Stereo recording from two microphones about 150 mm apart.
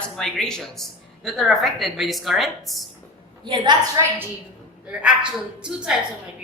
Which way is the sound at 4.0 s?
20° right (ahead or behind).